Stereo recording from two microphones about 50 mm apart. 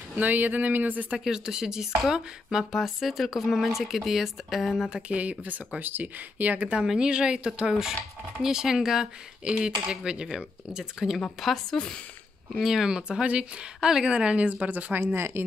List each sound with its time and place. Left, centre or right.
0.1 s speech: right
1.2 s speech: centre
2.7 s speech: centre
4.8 s a woman's voice: right
7.0 s a woman's voice: centre
9.4 s speech: centre
11.4 s speech: centre
12.5 s speech: centre
12.8 s a woman's voice: centre
13.7 s a woman's voice: centre; by 15.0 s right
15.1 s speech: right